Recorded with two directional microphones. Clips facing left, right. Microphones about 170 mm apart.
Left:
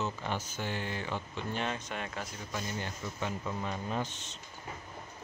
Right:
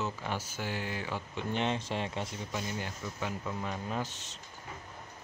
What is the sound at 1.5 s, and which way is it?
Speech, 25° right (ahead or behind).